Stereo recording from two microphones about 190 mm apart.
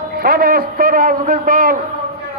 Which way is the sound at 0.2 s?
50° right (ahead or behind).